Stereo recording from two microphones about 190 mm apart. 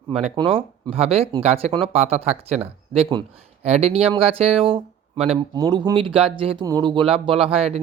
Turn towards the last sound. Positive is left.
turn(degrees=-30)  # may be behind; listen again after turning